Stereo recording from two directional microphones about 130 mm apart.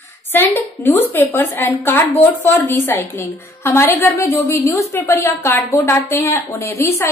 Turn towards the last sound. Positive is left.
turn(degrees=20)  # may be behind; listen again after turning